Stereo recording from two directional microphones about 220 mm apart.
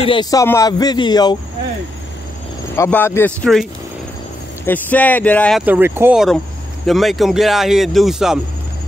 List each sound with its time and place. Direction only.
0.0 s speech: 20° left (ahead or behind)
2.7 s speech: 10° left (ahead or behind)
4.6 s speech: 10° left (ahead or behind)
5.7 s speech: 10° right (ahead or behind)